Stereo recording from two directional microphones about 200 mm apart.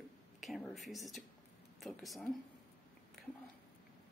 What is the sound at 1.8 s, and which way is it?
Speech, centre (ahead or behind).